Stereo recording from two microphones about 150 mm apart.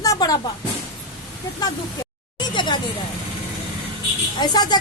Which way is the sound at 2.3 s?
30° left (ahead or behind).